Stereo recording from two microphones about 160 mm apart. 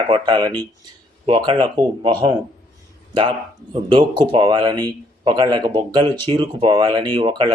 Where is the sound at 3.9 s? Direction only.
30° right (ahead or behind).